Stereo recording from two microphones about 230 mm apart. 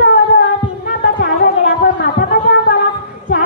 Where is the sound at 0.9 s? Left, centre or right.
Left.